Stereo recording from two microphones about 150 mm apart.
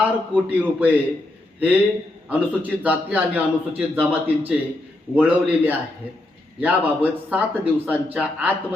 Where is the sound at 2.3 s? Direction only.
10° right (ahead or behind).